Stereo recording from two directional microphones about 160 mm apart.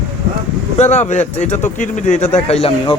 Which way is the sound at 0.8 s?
45° left (ahead or behind).